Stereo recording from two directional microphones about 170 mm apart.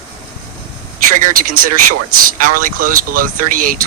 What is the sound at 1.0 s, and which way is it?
Speech, 50° right (ahead or behind).